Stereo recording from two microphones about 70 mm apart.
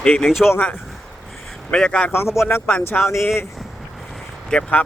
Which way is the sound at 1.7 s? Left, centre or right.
Centre.